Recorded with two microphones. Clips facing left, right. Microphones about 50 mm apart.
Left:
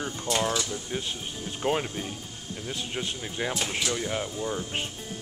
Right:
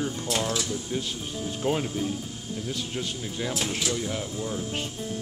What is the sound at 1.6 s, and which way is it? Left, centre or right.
Speech, centre.